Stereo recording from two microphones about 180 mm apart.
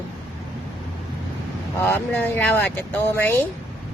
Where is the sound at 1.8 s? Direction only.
10° left (ahead or behind).